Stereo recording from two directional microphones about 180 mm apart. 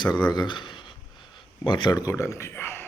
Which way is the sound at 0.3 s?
25° left (ahead or behind).